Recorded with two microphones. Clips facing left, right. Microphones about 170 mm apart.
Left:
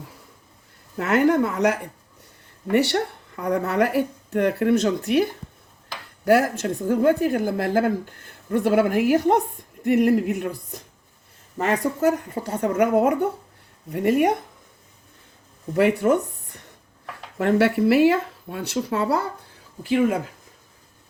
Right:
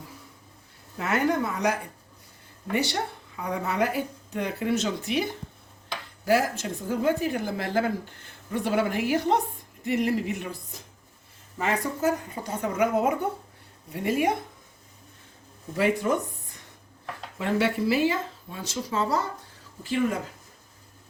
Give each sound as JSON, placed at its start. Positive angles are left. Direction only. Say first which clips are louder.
{"t": 0.9, "sound": "speech", "louder": "left 6 dB", "side_deg": 60}
{"t": 6.2, "sound": "speech", "louder": "left 5 dB", "side_deg": 60}
{"t": 11.6, "sound": "speech", "louder": "left 5 dB", "side_deg": 65}
{"t": 15.7, "sound": "speech", "louder": "left 6 dB", "side_deg": 60}